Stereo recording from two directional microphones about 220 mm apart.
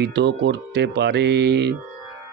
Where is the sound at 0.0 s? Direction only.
50° right (ahead or behind).